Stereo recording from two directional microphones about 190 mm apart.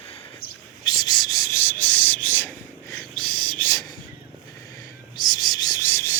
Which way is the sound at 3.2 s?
25° right (ahead or behind).